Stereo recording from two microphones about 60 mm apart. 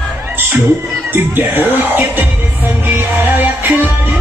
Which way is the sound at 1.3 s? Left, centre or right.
Right.